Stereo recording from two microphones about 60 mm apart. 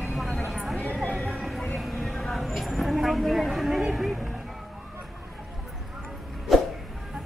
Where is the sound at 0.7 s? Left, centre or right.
Left.